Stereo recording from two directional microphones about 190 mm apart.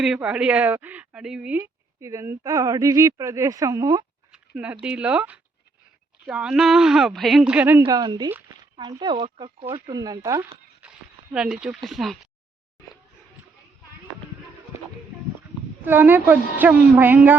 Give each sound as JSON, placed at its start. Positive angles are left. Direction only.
{"t": 0.0, "sound": "a woman's voice", "side_deg": -5}
{"t": 4.3, "sound": "speech", "side_deg": -10}
{"t": 7.9, "sound": "speech", "side_deg": -20}
{"t": 10.8, "sound": "speech", "side_deg": -5}
{"t": 15.8, "sound": "a woman's voice", "side_deg": -10}